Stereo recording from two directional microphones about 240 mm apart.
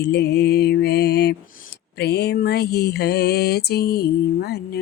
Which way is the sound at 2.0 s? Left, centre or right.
Left.